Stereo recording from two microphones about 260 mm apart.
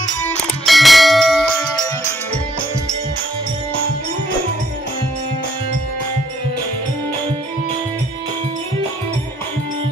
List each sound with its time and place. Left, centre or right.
0.7 s bell: centre